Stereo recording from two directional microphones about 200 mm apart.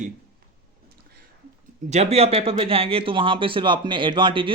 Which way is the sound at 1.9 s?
30° right (ahead or behind).